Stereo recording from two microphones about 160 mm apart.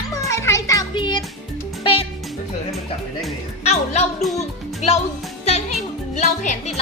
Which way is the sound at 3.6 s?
45° left (ahead or behind).